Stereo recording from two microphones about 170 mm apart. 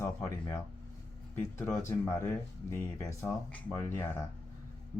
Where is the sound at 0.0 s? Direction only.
15° left (ahead or behind).